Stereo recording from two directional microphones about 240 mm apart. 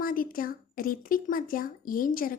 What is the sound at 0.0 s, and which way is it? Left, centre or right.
A woman's voice, left.